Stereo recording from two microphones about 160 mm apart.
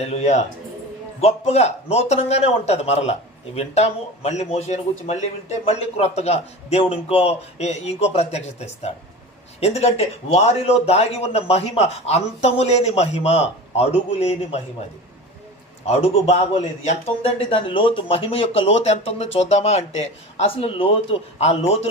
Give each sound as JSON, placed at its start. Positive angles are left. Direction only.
{"t": 0.0, "sound": "a man's voice", "side_deg": 40}
{"t": 15.9, "sound": "a man's voice", "side_deg": 40}